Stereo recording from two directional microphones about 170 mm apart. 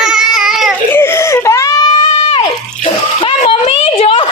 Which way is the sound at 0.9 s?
15° left (ahead or behind).